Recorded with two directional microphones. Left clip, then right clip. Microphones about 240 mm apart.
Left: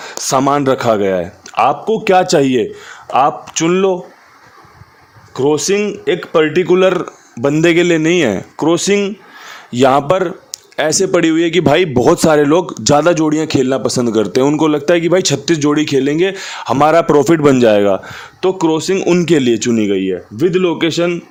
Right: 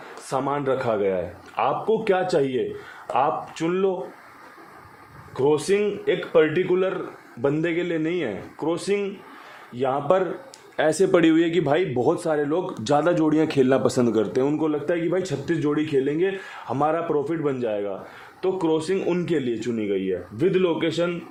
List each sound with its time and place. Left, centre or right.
0.3 s speech: left
5.3 s speech: left
10.8 s a man's voice: left